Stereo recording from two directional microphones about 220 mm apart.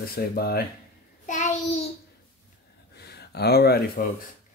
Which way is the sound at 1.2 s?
35° left (ahead or behind).